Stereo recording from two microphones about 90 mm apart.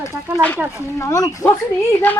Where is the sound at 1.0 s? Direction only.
35° left (ahead or behind).